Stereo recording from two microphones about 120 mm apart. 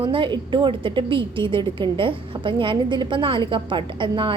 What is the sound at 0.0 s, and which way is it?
A woman's voice, 45° right (ahead or behind).